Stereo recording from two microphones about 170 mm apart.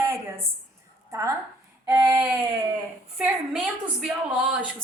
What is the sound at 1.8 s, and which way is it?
Speech, 15° right (ahead or behind).